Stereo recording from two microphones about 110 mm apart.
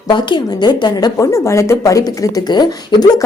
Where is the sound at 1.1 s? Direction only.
25° left (ahead or behind).